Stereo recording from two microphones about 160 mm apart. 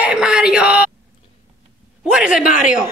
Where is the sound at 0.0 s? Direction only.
5° right (ahead or behind).